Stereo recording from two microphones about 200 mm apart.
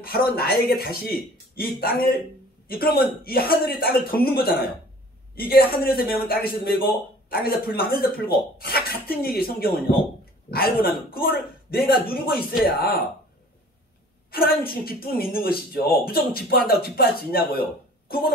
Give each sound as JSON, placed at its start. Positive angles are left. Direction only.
{"t": 0.0, "sound": "speech", "side_deg": 50}
{"t": 14.3, "sound": "a woman's voice", "side_deg": 50}